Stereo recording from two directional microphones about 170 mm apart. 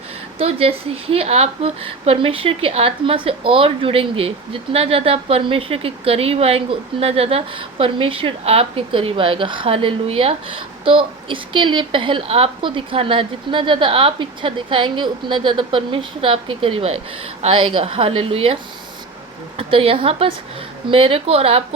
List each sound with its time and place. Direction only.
0.3 s a woman's voice: 35° right (ahead or behind)
19.5 s a woman's voice: 35° right (ahead or behind)